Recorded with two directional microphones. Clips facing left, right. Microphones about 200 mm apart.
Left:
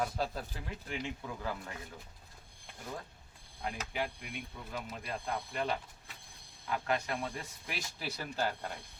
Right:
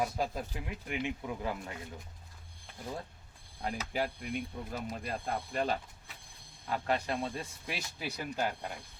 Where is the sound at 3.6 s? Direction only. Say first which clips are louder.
Right 3 dB; 40° right (ahead or behind).